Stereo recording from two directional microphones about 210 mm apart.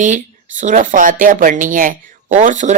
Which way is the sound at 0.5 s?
35° right (ahead or behind).